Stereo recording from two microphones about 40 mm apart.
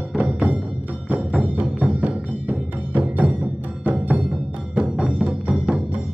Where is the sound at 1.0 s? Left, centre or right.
Right.